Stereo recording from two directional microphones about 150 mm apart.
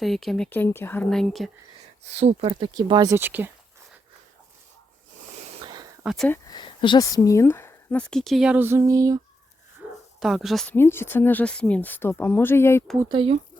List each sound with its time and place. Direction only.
0.0 s speech: centre (ahead or behind)
1.1 s speech: centre (ahead or behind)
2.0 s speech: 45° right (ahead or behind)
2.7 s speech: 30° right (ahead or behind)
3.2 s speech: 15° right (ahead or behind)
5.5 s a sound: 30° right (ahead or behind)
6.5 s speech: 30° left (ahead or behind); by 9.2 s 20° right (ahead or behind)
10.2 s speech: centre (ahead or behind)
10.8 s speech: 15° left (ahead or behind)
13.1 s speech: 35° right (ahead or behind)